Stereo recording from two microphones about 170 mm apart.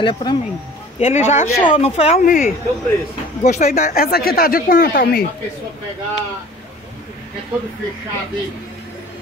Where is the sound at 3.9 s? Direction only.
60° left (ahead or behind).